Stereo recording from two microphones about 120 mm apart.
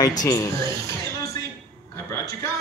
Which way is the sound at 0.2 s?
35° left (ahead or behind).